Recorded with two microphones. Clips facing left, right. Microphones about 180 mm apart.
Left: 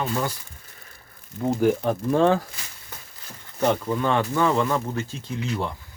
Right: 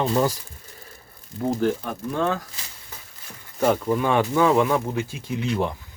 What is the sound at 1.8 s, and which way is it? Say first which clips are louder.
Speech: left 6 dB; 30° left (ahead or behind).